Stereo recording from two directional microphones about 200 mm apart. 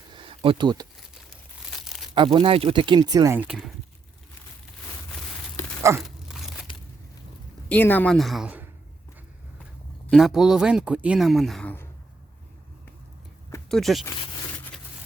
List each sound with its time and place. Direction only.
0.1 s a sound: 25° right (ahead or behind)
2.1 s speech: 25° right (ahead or behind); by 3.7 s 5° right (ahead or behind)
5.9 s a sound: 15° right (ahead or behind)
6.2 s crumpling: centre (ahead or behind)
7.7 s speech: 10° left (ahead or behind)
10.1 s speech: centre (ahead or behind)
13.7 s speech: centre (ahead or behind)